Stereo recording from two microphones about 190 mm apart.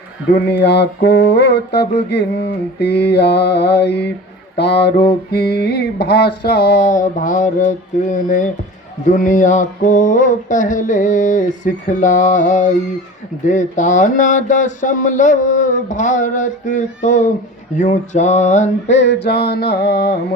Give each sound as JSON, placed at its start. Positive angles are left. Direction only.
{"t": 0.3, "sound": "mantra", "side_deg": 60}
{"t": 6.8, "sound": "mantra", "side_deg": 40}
{"t": 9.0, "sound": "speech", "side_deg": 40}
{"t": 18.9, "sound": "mantra", "side_deg": 65}